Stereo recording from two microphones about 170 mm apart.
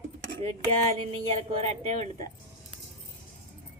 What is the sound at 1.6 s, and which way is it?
Child singing, 40° right (ahead or behind).